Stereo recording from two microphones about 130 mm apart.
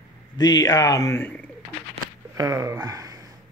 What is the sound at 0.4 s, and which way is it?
A man's voice, 30° left (ahead or behind).